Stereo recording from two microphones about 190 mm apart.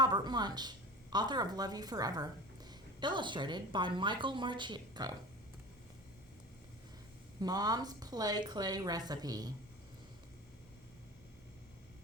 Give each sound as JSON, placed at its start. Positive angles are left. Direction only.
{"t": 0.0, "sound": "a sound", "side_deg": -20}
{"t": 1.1, "sound": "a woman's voice", "side_deg": -20}
{"t": 7.4, "sound": "a woman's voice", "side_deg": -20}